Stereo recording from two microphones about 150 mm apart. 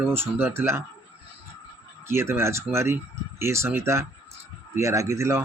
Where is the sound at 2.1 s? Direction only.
15° right (ahead or behind).